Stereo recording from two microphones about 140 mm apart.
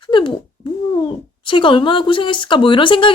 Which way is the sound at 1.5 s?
35° left (ahead or behind).